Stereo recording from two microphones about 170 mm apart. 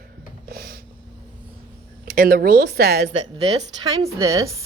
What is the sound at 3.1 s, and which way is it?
Speech, 35° right (ahead or behind).